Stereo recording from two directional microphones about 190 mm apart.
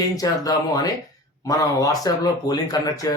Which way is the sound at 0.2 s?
20° left (ahead or behind).